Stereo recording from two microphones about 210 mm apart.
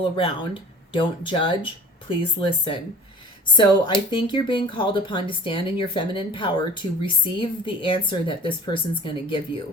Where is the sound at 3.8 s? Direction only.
20° left (ahead or behind).